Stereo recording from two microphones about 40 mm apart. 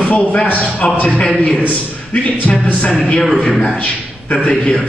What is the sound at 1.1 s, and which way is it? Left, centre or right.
Speech, centre.